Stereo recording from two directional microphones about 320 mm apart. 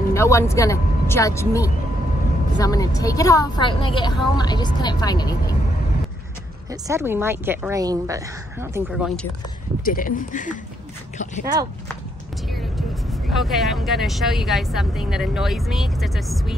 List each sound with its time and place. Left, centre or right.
0.1 s a woman's voice: centre
6.7 s speech: centre
9.8 s speech: left
12.4 s speech: centre